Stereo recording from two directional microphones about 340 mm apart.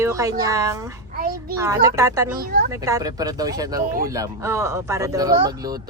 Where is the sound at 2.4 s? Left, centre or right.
Right.